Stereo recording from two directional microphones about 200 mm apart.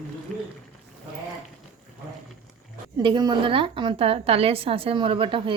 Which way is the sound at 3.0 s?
25° right (ahead or behind).